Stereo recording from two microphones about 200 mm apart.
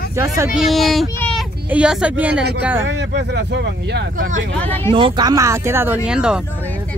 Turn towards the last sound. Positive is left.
turn(degrees=-5)  # may be behind; listen again after turning